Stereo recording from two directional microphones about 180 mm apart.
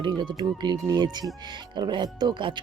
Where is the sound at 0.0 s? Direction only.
25° right (ahead or behind).